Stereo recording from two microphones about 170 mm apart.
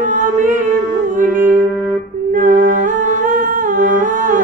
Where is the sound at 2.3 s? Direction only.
50° right (ahead or behind).